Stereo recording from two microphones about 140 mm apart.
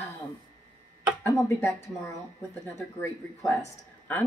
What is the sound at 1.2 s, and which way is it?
Speech, 15° left (ahead or behind).